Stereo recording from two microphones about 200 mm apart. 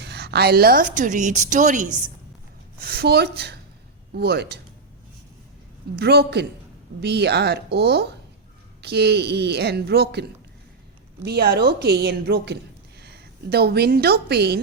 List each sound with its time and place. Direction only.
0.0 s a woman's voice: 55° right (ahead or behind); by 1.9 s 40° right (ahead or behind)
2.8 s a woman's voice: 50° right (ahead or behind)
6.0 s a woman's voice: 55° right (ahead or behind)
11.3 s a woman's voice: 50° right (ahead or behind)